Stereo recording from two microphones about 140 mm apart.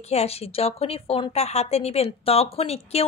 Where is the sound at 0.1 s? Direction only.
50° left (ahead or behind).